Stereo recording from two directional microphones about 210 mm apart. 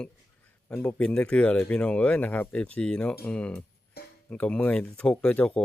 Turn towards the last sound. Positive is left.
turn(degrees=5)  # may be behind; listen again after turning